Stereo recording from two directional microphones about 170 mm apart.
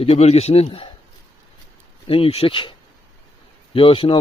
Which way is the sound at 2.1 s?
35° left (ahead or behind).